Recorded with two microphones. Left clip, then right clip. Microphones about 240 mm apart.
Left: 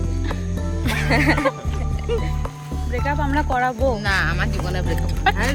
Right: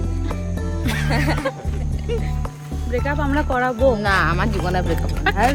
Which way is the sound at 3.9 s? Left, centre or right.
Right.